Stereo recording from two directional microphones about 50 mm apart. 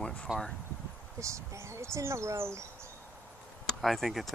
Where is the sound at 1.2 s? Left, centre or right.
Right.